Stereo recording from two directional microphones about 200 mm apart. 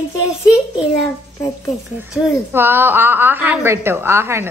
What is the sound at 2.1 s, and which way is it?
A woman's voice, 5° right (ahead or behind).